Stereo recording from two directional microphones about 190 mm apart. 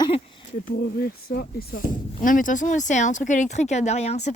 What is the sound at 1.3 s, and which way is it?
Speech, 50° left (ahead or behind).